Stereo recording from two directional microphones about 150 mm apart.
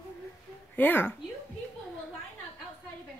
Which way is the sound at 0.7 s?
15° left (ahead or behind).